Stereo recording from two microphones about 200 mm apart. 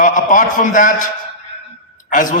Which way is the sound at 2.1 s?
40° left (ahead or behind).